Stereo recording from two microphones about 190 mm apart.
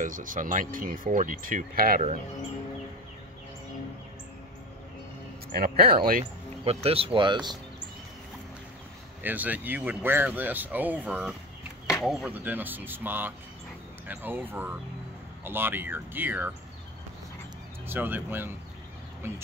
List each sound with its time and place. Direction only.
0.0 s speech: 45° right (ahead or behind)
5.5 s speech: 55° right (ahead or behind)
6.6 s speech: 30° right (ahead or behind)
9.2 s speech: 10° right (ahead or behind)
17.8 s speech: 10° right (ahead or behind)